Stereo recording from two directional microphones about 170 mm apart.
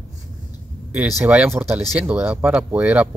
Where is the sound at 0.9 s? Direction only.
5° right (ahead or behind).